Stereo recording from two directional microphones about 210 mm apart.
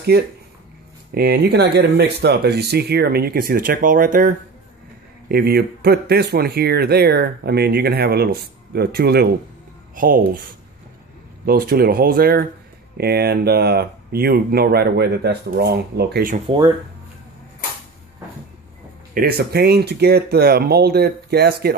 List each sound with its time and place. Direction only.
0.1 s speech: 50° right (ahead or behind)
11.4 s speech: 45° right (ahead or behind)
16.4 s speech: 25° right (ahead or behind)
19.1 s speech: 45° right (ahead or behind)